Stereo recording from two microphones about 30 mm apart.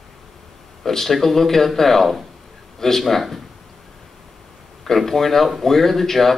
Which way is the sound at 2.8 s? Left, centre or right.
Centre.